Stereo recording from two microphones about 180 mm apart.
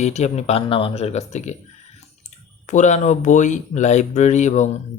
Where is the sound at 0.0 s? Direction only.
40° left (ahead or behind).